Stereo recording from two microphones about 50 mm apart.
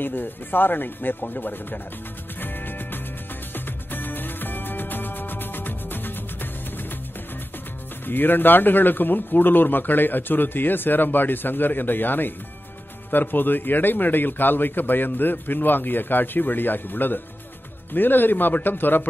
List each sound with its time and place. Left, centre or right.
0.0 s speech: left
2.4 s music: left
8.0 s speech: left